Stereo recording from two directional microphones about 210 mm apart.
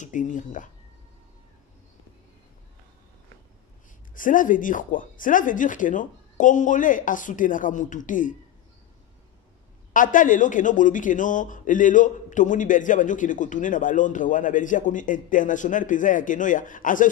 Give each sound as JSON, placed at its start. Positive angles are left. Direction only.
{"t": 0.0, "sound": "speech", "side_deg": 35}
{"t": 4.1, "sound": "speech", "side_deg": 40}
{"t": 9.9, "sound": "speech", "side_deg": 40}